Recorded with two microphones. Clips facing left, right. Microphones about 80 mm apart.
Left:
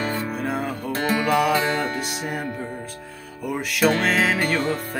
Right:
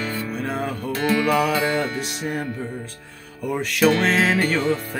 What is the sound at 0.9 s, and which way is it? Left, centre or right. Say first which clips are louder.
Music: right 2 dB; left.